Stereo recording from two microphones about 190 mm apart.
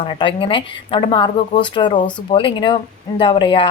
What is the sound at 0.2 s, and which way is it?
A woman's voice, 25° left (ahead or behind).